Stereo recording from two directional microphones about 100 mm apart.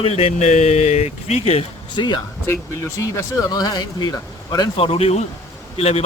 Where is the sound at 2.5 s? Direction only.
30° left (ahead or behind).